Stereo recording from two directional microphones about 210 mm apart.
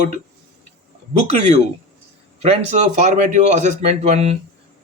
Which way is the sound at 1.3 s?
35° right (ahead or behind).